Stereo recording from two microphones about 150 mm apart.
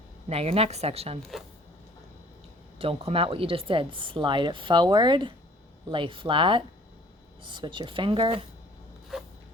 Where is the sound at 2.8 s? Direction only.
40° right (ahead or behind).